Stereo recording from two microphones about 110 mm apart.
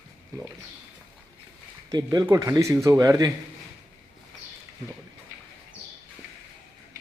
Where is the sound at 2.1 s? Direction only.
35° right (ahead or behind).